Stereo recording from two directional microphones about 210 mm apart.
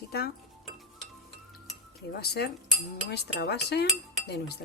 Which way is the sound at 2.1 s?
50° left (ahead or behind).